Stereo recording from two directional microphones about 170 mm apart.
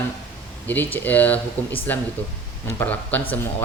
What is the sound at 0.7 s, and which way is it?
Speech, 10° left (ahead or behind).